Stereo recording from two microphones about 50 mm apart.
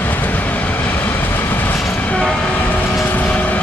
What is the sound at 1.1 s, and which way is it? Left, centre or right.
Vehicle, left.